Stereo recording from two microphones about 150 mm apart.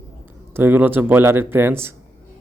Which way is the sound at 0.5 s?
15° right (ahead or behind).